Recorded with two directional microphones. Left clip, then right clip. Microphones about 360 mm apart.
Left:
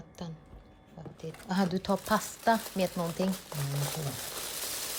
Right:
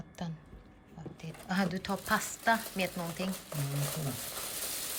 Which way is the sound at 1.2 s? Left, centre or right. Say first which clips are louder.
Left 2 dB; centre.